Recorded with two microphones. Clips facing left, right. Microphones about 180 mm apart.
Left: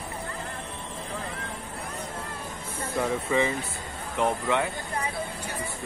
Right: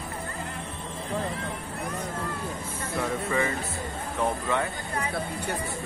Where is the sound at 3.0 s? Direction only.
15° left (ahead or behind).